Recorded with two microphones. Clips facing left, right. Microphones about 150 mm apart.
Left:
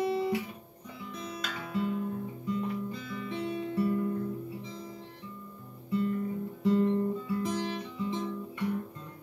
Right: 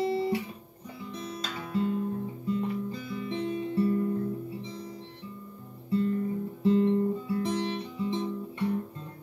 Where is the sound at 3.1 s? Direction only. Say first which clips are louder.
Right 3 dB; 30° right (ahead or behind).